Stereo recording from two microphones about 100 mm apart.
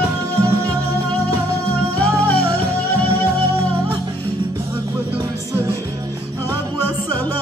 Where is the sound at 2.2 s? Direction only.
20° left (ahead or behind).